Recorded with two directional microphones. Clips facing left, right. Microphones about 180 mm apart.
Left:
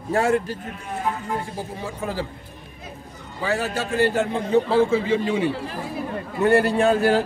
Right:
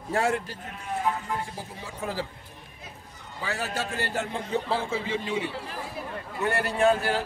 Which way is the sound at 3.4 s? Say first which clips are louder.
Left 7 dB; 65° left (ahead or behind).